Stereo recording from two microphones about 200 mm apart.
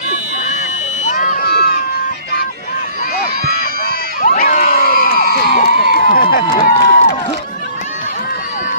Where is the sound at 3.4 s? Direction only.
50° right (ahead or behind).